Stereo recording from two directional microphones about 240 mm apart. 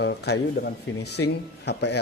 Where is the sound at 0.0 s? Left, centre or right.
Left.